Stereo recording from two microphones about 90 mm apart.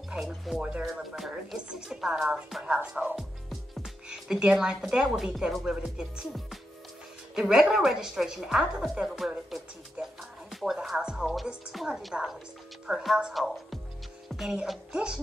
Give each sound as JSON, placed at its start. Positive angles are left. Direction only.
{"t": 0.1, "sound": "a woman's voice", "side_deg": -5}
{"t": 10.0, "sound": "speech", "side_deg": -15}
{"t": 10.5, "sound": "a woman's voice", "side_deg": -5}